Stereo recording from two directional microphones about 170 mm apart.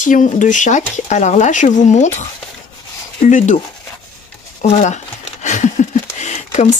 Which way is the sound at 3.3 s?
45° left (ahead or behind).